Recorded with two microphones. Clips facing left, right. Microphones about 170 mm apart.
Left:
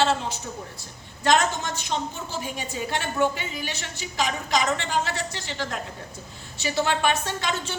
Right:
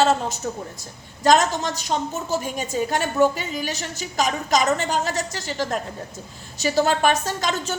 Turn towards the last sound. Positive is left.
turn(degrees=-40)  # may be behind; listen again after turning